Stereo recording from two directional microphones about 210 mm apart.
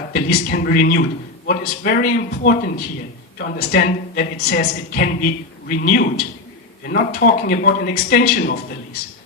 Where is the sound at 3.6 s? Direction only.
45° left (ahead or behind).